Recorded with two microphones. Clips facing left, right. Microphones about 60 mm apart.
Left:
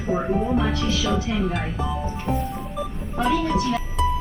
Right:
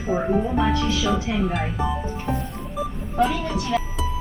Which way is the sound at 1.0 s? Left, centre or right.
Centre.